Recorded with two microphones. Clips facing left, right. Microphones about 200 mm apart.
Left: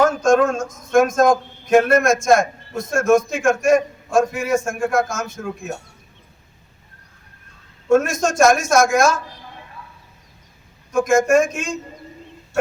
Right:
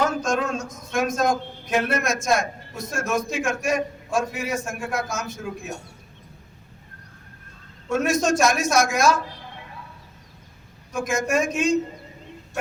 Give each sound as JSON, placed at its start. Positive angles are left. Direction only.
{"t": 0.0, "sound": "speech", "side_deg": 50}
{"t": 8.1, "sound": "speech", "side_deg": 50}
{"t": 11.1, "sound": "speech", "side_deg": 50}